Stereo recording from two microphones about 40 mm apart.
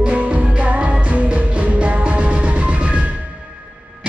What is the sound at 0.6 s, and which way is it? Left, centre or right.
Music, right.